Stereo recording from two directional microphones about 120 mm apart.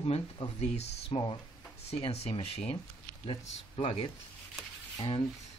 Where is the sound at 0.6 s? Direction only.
60° left (ahead or behind).